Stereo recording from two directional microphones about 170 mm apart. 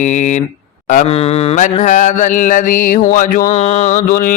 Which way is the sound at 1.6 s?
45° left (ahead or behind).